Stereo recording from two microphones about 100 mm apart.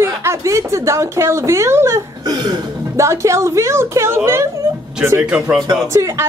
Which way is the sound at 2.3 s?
45° right (ahead or behind).